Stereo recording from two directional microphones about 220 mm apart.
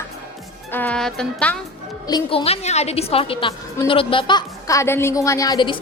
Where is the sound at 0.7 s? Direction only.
5° left (ahead or behind).